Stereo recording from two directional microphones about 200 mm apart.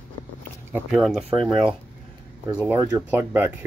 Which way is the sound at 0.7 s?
Centre (ahead or behind).